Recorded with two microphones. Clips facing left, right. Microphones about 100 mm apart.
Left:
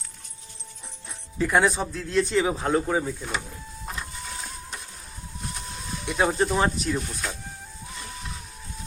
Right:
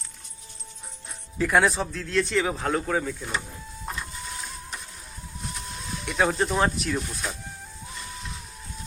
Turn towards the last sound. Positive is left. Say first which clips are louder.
# even
turn(degrees=0)  # may be behind; listen again after turning